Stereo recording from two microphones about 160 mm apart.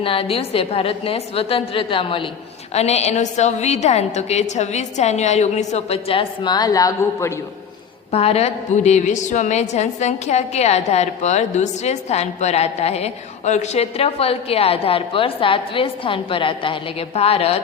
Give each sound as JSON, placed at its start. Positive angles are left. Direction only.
{"t": 0.0, "sound": "a woman's voice", "side_deg": 35}
{"t": 8.1, "sound": "a woman's voice", "side_deg": 40}